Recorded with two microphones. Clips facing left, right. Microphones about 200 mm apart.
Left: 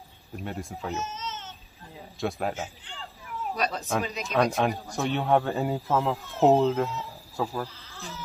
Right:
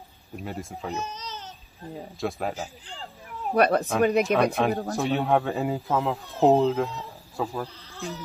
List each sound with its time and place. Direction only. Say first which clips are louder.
0.4 s a man's voice: even; centre (ahead or behind)
1.0 s a sound: even; 35° right (ahead or behind)
2.1 s a man's voice: even; centre (ahead or behind)
3.5 s speech: right 9 dB; 60° right (ahead or behind)
4.6 s a man's voice: right 3 dB; centre (ahead or behind)
7.9 s insect: right 7 dB; 35° right (ahead or behind)